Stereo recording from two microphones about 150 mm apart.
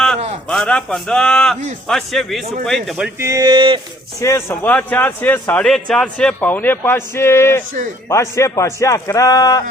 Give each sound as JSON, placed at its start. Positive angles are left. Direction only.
{"t": 0.5, "sound": "a man's voice", "side_deg": 5}
{"t": 3.2, "sound": "speech", "side_deg": -20}
{"t": 3.5, "sound": "speech", "side_deg": -35}
{"t": 4.2, "sound": "a man's voice", "side_deg": 15}